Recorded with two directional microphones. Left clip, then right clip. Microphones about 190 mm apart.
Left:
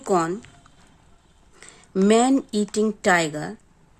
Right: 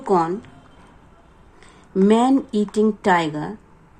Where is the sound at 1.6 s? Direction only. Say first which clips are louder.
Right 2 dB; 45° left (ahead or behind).